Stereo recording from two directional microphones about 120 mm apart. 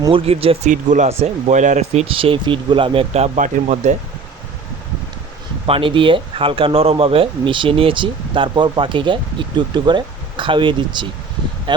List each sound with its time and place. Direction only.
0.1 s speech: 50° right (ahead or behind)
0.7 s speech: 90° right
5.6 s speech: 50° right (ahead or behind)